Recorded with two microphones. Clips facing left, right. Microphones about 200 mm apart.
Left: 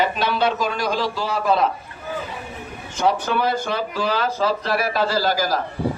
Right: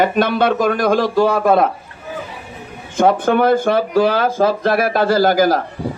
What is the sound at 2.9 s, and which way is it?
Speech, 55° right (ahead or behind).